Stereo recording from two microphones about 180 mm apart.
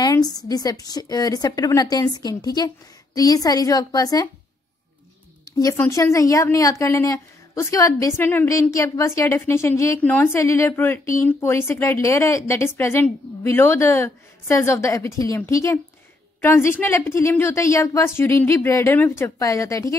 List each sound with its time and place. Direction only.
0.0 s a woman's voice: 20° left (ahead or behind)
5.6 s a woman's voice: 20° left (ahead or behind)